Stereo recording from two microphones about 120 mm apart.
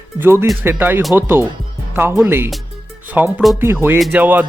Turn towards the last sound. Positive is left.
turn(degrees=-15)  # may be behind; listen again after turning